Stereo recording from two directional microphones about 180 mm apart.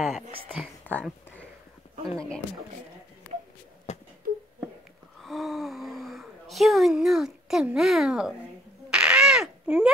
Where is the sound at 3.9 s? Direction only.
40° left (ahead or behind).